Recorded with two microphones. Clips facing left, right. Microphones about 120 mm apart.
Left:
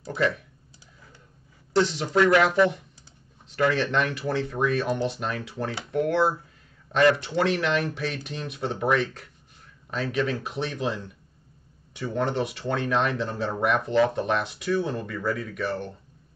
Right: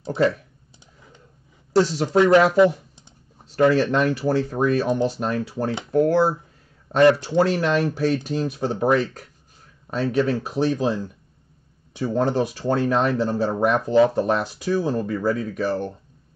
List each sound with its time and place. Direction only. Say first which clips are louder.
0.0 s speech: right 5 dB; 25° right (ahead or behind)
1.8 s speech: right 4 dB; 35° right (ahead or behind)
2.1 s speech: right 4 dB; 20° right (ahead or behind)
3.4 s speech: right 6 dB; 35° right (ahead or behind)